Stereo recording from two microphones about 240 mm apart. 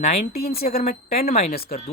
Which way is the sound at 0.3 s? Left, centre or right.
Left.